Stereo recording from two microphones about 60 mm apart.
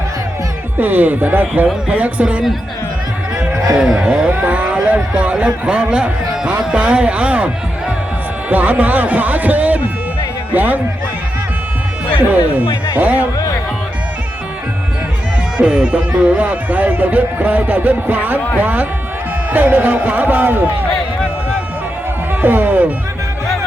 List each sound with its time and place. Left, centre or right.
0.8 s speech: right
3.8 s speech: centre
4.3 s a sound: right
5.1 s speech: centre
13.0 s speech: right
15.5 s speech: centre; by 20.6 s right
22.3 s music: right